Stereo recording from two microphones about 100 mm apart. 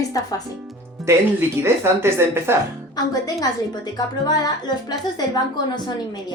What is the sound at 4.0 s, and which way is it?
A woman's voice, 40° left (ahead or behind).